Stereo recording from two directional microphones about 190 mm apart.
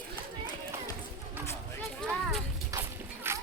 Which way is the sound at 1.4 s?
10° right (ahead or behind).